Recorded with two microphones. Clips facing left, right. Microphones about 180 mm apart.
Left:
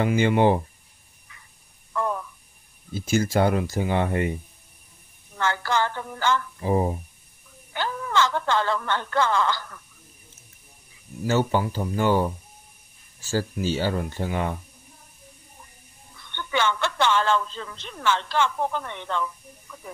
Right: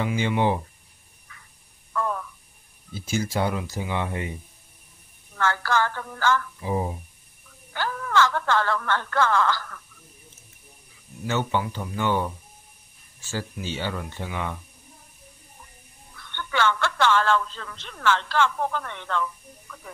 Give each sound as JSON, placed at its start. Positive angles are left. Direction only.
{"t": 0.0, "sound": "speech", "side_deg": 50}
{"t": 2.0, "sound": "a sound", "side_deg": 20}
{"t": 2.9, "sound": "speech", "side_deg": 50}
{"t": 5.4, "sound": "speech", "side_deg": 20}
{"t": 6.6, "sound": "speech", "side_deg": 50}
{"t": 7.7, "sound": "speech", "side_deg": 20}
{"t": 11.2, "sound": "speech", "side_deg": 35}
{"t": 16.2, "sound": "speech", "side_deg": 15}